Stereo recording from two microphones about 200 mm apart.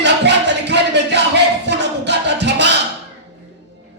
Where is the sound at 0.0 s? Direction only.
60° right (ahead or behind).